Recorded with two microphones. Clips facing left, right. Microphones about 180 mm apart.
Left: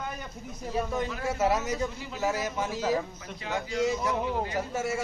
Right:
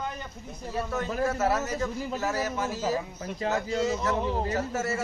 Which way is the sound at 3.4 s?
40° right (ahead or behind).